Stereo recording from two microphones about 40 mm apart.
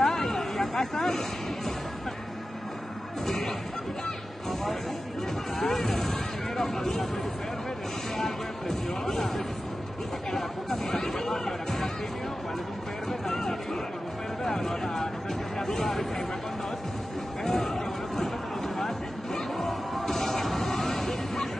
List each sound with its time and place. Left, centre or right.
0.0 s a sound: centre
5.7 s vehicle: centre
8.2 s music: centre
13.3 s chatter: centre
14.4 s music: centre
17.4 s chatter: centre
18.8 s music: centre